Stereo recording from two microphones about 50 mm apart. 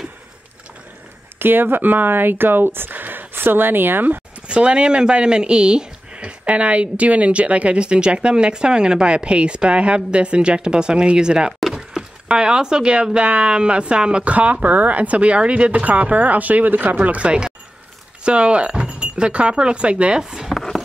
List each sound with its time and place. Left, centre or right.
1.4 s speech: right
4.5 s speech: right
11.6 s a sound: centre
12.3 s speech: centre
20.2 s speech: centre